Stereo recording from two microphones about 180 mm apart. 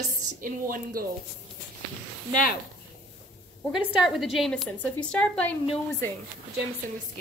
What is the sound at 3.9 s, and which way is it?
A woman's voice, centre (ahead or behind).